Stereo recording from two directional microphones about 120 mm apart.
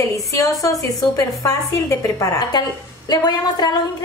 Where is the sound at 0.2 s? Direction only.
25° left (ahead or behind).